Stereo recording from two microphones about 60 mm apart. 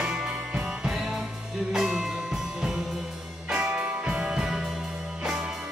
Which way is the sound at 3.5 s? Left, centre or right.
Right.